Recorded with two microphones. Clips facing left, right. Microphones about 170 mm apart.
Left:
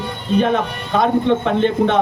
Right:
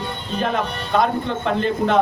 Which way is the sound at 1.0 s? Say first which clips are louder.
Left 7 dB; centre (ahead or behind).